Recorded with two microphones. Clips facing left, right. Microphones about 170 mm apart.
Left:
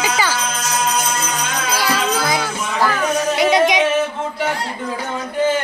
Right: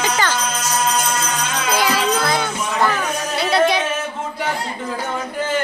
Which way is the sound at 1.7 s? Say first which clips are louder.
Right 2 dB; 15° right (ahead or behind).